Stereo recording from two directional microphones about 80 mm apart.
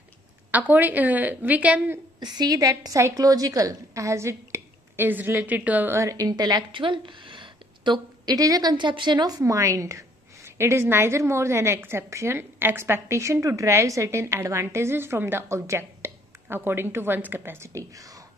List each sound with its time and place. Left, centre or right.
0.5 s speech: right
2.1 s a woman's voice: right; by 5.9 s centre
5.9 s a woman's voice: right
8.3 s a woman's voice: right
9.4 s a woman's voice: right